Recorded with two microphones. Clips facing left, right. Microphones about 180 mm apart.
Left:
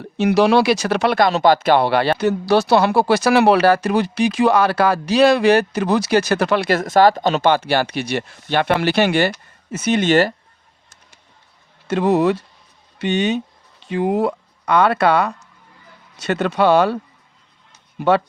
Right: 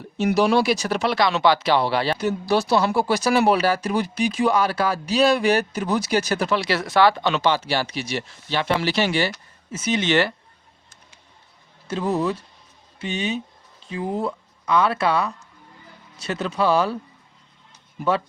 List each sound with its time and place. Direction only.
0.0 s speech: 75° left (ahead or behind); by 10.3 s 45° left (ahead or behind)
11.9 s speech: 70° left (ahead or behind)